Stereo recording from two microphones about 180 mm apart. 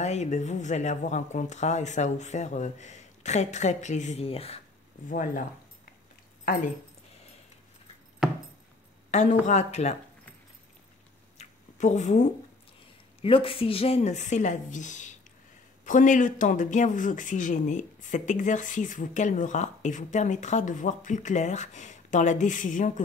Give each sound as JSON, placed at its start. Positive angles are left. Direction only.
{"t": 0.0, "sound": "speech", "side_deg": 40}
{"t": 5.1, "sound": "speech", "side_deg": 45}
{"t": 8.2, "sound": "a sound", "side_deg": 0}
{"t": 9.1, "sound": "speech", "side_deg": 40}
{"t": 11.3, "sound": "a sound", "side_deg": 40}
{"t": 13.2, "sound": "speech", "side_deg": 30}